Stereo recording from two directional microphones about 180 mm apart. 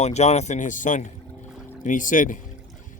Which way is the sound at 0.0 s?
40° left (ahead or behind).